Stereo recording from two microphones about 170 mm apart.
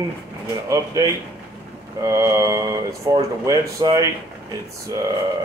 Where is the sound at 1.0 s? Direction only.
20° right (ahead or behind).